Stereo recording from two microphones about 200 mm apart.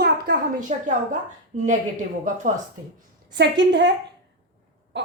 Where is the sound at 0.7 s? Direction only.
35° right (ahead or behind).